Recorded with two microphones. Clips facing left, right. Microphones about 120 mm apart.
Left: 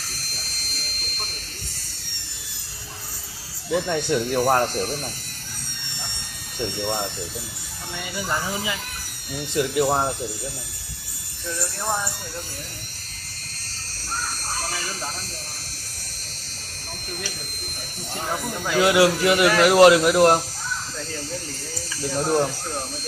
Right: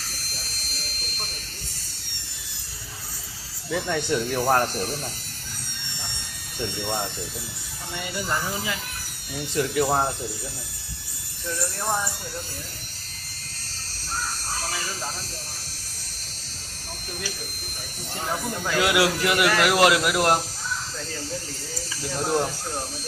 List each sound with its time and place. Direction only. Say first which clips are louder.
3.7 s a man's voice: left 3 dB; 20° left (ahead or behind)
6.6 s a man's voice: left 2 dB; 20° left (ahead or behind)
7.9 s speech: right 1 dB; 5° right (ahead or behind)
8.2 s speech: left 2 dB; 10° left (ahead or behind)
11.8 s speech: even; 5° right (ahead or behind)
18.3 s speech: left 1 dB; 10° left (ahead or behind)
18.8 s a man's voice: left 5 dB; 25° left (ahead or behind)
22.1 s speech: left 3 dB; 15° left (ahead or behind)